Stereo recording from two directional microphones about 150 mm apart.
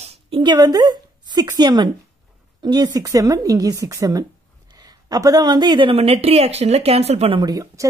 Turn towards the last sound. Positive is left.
turn(degrees=-25)  # may be behind; listen again after turning